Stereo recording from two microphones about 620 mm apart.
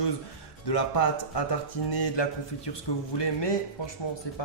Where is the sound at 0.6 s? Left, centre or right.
Left.